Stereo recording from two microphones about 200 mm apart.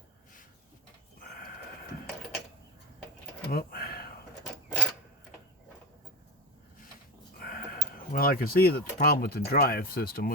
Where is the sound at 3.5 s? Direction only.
45° left (ahead or behind).